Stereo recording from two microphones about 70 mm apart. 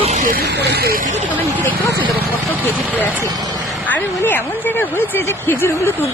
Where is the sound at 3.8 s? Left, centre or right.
Left.